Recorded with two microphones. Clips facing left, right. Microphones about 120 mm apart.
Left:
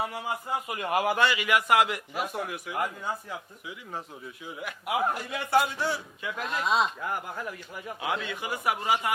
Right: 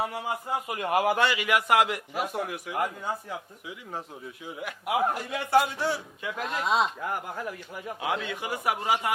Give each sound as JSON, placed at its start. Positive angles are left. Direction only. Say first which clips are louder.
{"t": 0.0, "sound": "a man's voice", "louder": "right 1 dB", "side_deg": -45}
{"t": 4.4, "sound": "a man's voice", "louder": "right 2 dB", "side_deg": -50}
{"t": 8.0, "sound": "a man's voice", "louder": "right 1 dB", "side_deg": -45}